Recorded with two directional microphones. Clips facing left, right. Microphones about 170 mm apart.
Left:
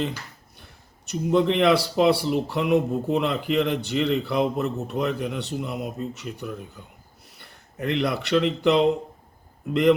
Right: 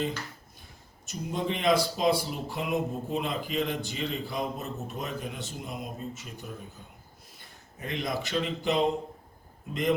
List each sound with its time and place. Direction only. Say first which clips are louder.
0.6 s speech: left 2 dB; 70° left (ahead or behind)